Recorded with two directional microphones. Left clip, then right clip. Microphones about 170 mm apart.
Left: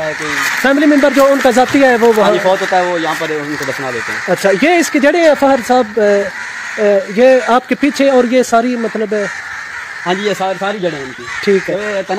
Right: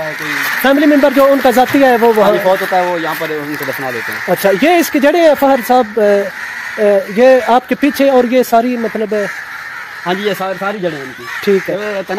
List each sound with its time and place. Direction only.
0.7 s speech: 10° right (ahead or behind)
2.2 s speech: 10° left (ahead or behind)
4.3 s speech: 15° right (ahead or behind)
11.7 s speech: 25° right (ahead or behind)